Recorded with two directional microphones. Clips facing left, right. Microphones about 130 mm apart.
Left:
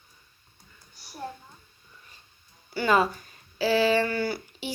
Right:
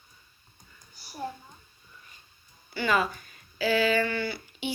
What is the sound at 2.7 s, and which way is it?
Speech, 35° left (ahead or behind).